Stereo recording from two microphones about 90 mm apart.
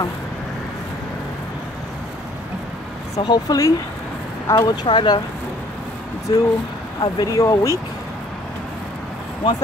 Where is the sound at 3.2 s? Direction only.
50° left (ahead or behind).